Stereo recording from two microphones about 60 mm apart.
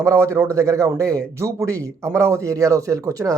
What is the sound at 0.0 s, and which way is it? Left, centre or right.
Speech, right.